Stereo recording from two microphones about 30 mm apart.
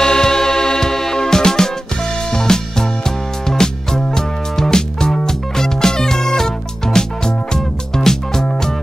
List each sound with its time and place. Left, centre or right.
0.0 s music: left